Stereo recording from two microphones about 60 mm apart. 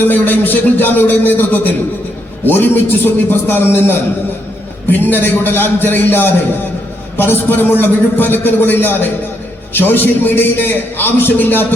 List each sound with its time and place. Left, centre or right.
0.0 s a man's voice: left